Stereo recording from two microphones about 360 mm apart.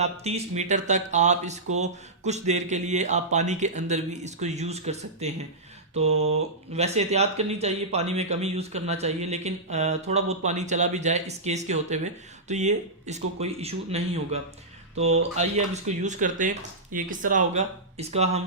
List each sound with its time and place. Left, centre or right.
0.0 s speech: centre
14.9 s speech: right
15.2 s speech: centre